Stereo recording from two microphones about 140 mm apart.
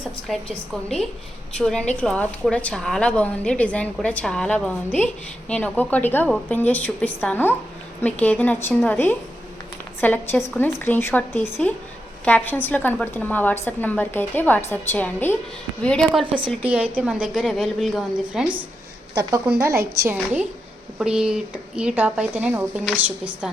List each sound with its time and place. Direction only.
0.3 s a woman's voice: centre (ahead or behind)
1.5 s a woman's voice: 5° left (ahead or behind)
16.9 s a woman's voice: 10° right (ahead or behind)
19.3 s a woman's voice: 15° right (ahead or behind)